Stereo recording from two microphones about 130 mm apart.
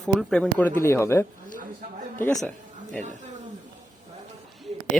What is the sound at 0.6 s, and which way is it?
Speech, 20° left (ahead or behind).